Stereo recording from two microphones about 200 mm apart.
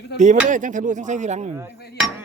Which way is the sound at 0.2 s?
35° right (ahead or behind).